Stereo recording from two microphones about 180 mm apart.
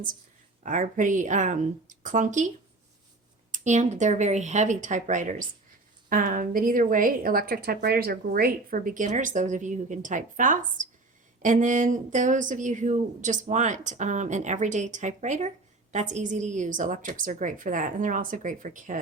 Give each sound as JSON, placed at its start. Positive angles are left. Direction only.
{"t": 0.6, "sound": "speech", "side_deg": -45}
{"t": 3.5, "sound": "speech", "side_deg": -45}